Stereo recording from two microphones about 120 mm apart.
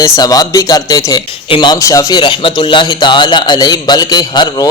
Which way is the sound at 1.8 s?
25° left (ahead or behind).